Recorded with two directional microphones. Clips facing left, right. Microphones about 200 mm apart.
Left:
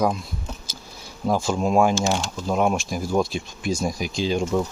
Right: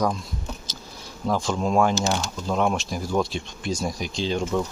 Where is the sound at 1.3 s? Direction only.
10° left (ahead or behind).